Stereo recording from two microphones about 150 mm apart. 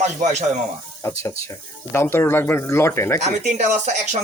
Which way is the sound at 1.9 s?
15° left (ahead or behind).